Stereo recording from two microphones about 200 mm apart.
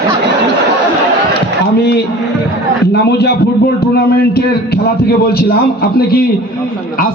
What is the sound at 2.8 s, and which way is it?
A man's voice, 55° left (ahead or behind).